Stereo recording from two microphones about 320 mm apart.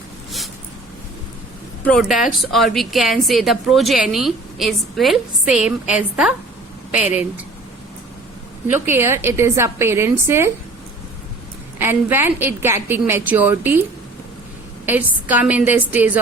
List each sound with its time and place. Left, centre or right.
1.8 s a woman's voice: centre
8.6 s a woman's voice: centre
11.8 s a woman's voice: centre
14.8 s a woman's voice: centre